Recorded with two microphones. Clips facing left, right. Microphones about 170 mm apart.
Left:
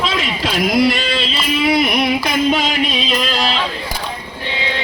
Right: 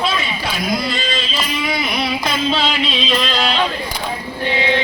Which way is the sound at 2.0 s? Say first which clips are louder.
Left 4 dB; 15° left (ahead or behind).